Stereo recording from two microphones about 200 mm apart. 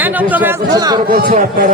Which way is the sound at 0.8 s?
20° right (ahead or behind).